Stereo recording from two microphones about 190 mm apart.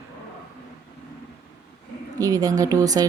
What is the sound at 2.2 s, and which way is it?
Speech, 20° right (ahead or behind).